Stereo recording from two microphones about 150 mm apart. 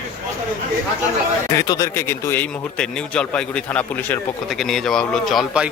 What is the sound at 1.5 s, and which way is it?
Speech, 25° left (ahead or behind).